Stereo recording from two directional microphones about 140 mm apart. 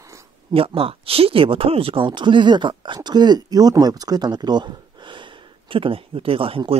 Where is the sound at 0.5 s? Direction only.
40° right (ahead or behind).